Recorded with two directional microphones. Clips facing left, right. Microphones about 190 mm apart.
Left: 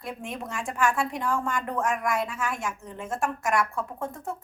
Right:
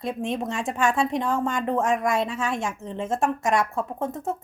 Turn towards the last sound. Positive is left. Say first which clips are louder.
# right 5 dB
turn(degrees=-25)  # may be behind; listen again after turning